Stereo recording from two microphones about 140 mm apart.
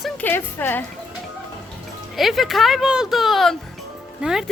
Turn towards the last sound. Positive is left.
turn(degrees=-5)  # may be behind; listen again after turning